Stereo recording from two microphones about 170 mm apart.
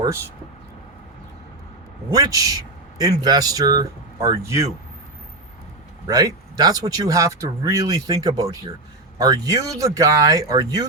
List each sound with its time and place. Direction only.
2.1 s speech: 20° right (ahead or behind)
6.1 s speech: 20° right (ahead or behind)